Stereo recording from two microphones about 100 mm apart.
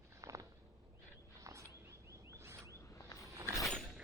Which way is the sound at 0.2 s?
35° right (ahead or behind).